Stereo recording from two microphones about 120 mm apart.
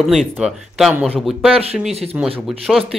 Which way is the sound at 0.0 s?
Centre (ahead or behind).